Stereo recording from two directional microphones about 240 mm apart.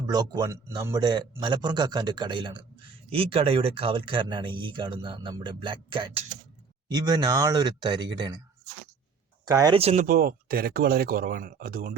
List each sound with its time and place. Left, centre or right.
0.1 s a man's voice: centre
9.5 s speech: centre; by 11.9 s right